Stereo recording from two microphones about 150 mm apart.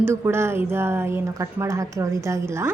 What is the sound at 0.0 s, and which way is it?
A woman's voice, 15° right (ahead or behind).